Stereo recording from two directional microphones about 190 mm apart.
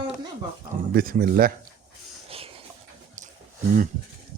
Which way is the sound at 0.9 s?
50° right (ahead or behind).